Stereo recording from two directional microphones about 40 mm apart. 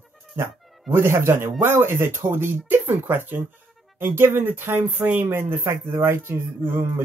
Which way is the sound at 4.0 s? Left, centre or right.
Right.